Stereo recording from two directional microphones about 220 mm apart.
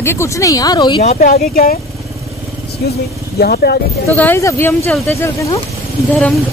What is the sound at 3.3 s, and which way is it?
Speech, 45° left (ahead or behind).